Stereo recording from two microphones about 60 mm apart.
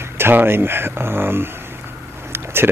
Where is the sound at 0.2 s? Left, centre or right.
Right.